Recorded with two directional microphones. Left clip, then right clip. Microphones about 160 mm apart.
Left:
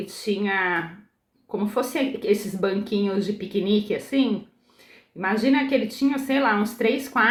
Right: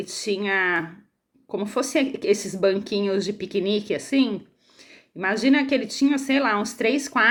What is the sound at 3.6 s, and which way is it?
Speech, 25° right (ahead or behind).